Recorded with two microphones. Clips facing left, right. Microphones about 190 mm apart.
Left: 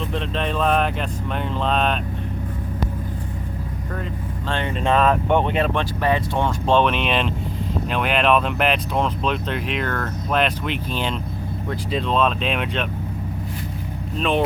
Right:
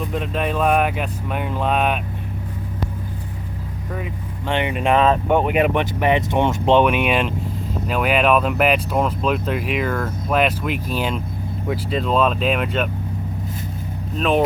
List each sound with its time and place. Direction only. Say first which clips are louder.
0.1 s speech: right 2 dB; 5° right (ahead or behind)
4.4 s speech: right 3 dB; 15° right (ahead or behind)
14.2 s speech: right 3 dB; 5° right (ahead or behind)